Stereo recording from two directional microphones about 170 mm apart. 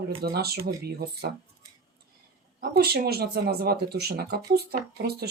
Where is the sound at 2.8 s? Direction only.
65° right (ahead or behind).